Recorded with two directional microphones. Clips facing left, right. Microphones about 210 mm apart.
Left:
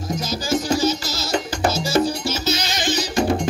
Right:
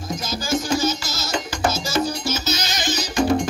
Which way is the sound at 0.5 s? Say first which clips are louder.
Left 2 dB; 35° left (ahead or behind).